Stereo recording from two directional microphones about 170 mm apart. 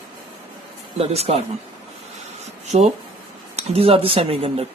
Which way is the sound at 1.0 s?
35° right (ahead or behind).